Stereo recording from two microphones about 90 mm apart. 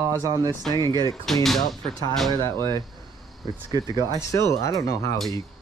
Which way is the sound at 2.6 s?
50° right (ahead or behind).